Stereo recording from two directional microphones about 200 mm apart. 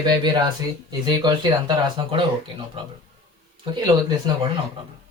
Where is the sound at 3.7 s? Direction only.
20° right (ahead or behind).